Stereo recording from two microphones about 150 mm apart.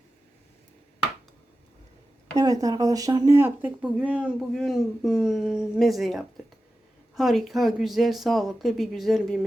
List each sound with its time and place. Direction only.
2.3 s speech: 25° right (ahead or behind)
3.3 s speech: 15° right (ahead or behind)